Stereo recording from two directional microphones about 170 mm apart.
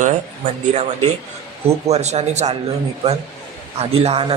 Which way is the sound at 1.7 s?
40° right (ahead or behind).